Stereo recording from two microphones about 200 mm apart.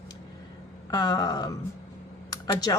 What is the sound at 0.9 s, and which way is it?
A woman's voice, 20° left (ahead or behind).